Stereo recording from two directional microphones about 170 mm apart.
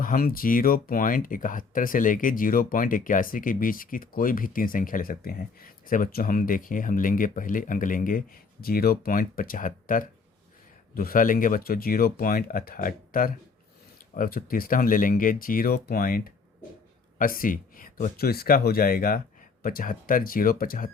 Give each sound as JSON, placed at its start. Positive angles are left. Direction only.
{"t": 0.0, "sound": "speech", "side_deg": 55}